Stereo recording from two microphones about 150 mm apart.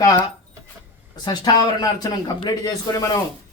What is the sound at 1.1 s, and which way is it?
Speech, 30° left (ahead or behind).